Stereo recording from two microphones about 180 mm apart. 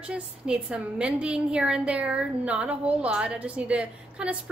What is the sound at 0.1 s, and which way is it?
A woman's voice, 5° right (ahead or behind).